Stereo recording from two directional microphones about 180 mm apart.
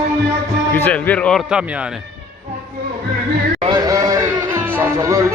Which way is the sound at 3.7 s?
20° right (ahead or behind).